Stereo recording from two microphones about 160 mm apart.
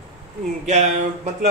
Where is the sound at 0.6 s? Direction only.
45° right (ahead or behind).